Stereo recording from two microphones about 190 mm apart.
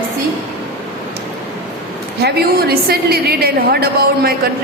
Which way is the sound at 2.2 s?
55° right (ahead or behind).